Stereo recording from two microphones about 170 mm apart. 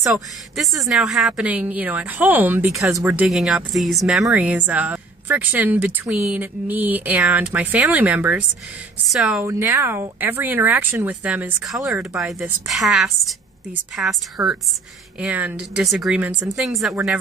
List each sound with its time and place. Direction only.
0.6 s speech: centre (ahead or behind)
3.0 s speech: 20° right (ahead or behind)
3.3 s speech: centre (ahead or behind)
9.4 s speech: 15° right (ahead or behind)